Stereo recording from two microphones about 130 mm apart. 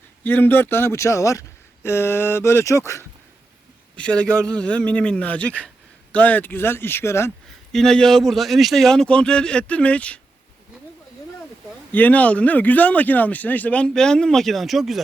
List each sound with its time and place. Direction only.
0.3 s speech: 15° left (ahead or behind)
3.9 s a man's voice: 10° left (ahead or behind)
7.7 s a man's voice: 5° left (ahead or behind)
11.9 s a man's voice: 15° left (ahead or behind)